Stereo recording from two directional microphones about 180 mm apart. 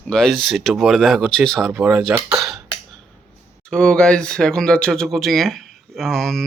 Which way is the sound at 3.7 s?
5° left (ahead or behind).